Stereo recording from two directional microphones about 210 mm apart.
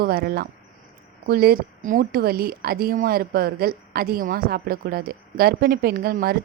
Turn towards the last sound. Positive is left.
turn(degrees=-45)  # may be behind; listen again after turning